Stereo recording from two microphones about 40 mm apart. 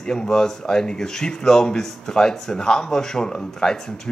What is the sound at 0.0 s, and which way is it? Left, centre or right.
Speech, centre.